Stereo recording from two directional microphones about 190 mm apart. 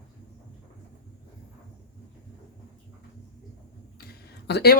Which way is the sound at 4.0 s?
55° left (ahead or behind).